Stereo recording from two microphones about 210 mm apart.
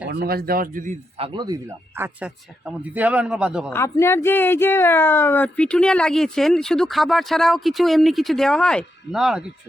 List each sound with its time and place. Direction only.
0.1 s speech: 50° right (ahead or behind)
1.2 s speech: 20° right (ahead or behind)
2.8 s speech: 5° right (ahead or behind)
3.7 s speech: 15° left (ahead or behind); by 9.4 s centre (ahead or behind)